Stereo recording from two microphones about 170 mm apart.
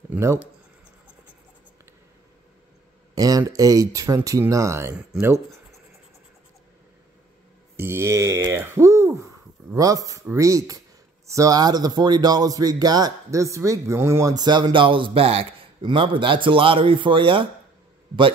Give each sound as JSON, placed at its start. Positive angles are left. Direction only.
{"t": 0.1, "sound": "speech", "side_deg": -15}
{"t": 3.2, "sound": "speech", "side_deg": -20}
{"t": 7.7, "sound": "mantra", "side_deg": -15}
{"t": 8.5, "sound": "speech", "side_deg": -15}